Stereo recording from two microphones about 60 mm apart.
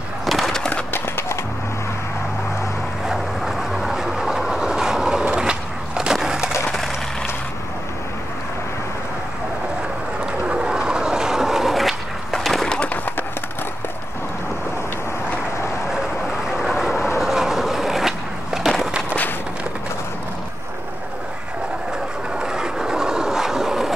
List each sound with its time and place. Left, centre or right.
0.3 s skateboard: centre
0.9 s skateboard: left
3.1 s train: centre
5.2 s skateboard: centre
10.2 s skateboard: centre
16.5 s train: centre
17.2 s skateboard: centre
22.4 s a sound: centre